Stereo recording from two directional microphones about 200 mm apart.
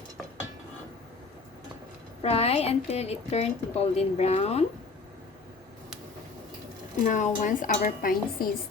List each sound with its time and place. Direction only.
2.2 s a woman's voice: 30° left (ahead or behind)
7.0 s a woman's voice: 40° left (ahead or behind)